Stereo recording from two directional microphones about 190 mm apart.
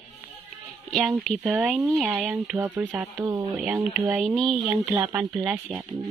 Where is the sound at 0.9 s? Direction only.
Centre (ahead or behind).